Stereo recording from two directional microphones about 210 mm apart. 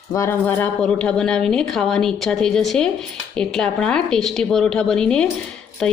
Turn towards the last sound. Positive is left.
turn(degrees=5)  # may be behind; listen again after turning